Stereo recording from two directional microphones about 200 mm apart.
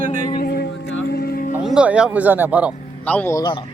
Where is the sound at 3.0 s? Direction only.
10° left (ahead or behind).